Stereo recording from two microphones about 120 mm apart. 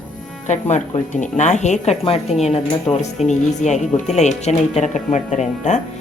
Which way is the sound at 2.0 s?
65° left (ahead or behind).